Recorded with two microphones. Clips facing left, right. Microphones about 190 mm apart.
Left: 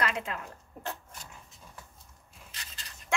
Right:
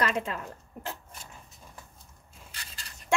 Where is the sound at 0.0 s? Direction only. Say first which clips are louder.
Right 3 dB; 30° right (ahead or behind).